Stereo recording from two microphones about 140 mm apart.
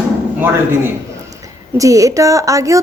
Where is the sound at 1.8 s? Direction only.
25° right (ahead or behind).